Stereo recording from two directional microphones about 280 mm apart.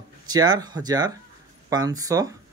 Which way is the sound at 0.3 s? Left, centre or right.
Centre.